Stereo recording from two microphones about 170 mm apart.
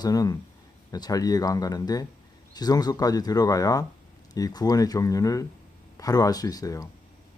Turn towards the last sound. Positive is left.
turn(degrees=20)  # may be behind; listen again after turning